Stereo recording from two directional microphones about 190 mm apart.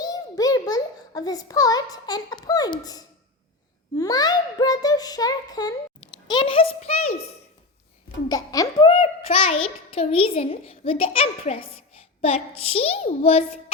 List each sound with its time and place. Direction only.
0.0 s a sound: 20° left (ahead or behind)
3.9 s a child's voice: 20° left (ahead or behind)
8.3 s a child's voice: 20° left (ahead or behind)